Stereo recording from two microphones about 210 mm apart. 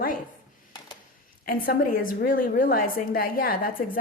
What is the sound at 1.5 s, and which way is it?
A woman's voice, 45° left (ahead or behind).